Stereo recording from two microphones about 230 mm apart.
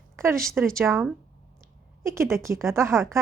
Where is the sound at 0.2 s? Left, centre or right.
Centre.